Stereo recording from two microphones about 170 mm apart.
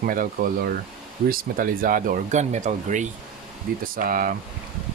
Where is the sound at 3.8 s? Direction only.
55° right (ahead or behind).